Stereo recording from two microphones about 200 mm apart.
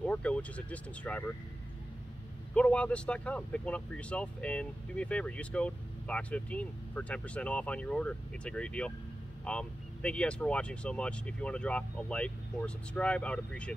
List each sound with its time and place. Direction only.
0.0 s speech: 5° left (ahead or behind)
2.5 s speech: 5° left (ahead or behind)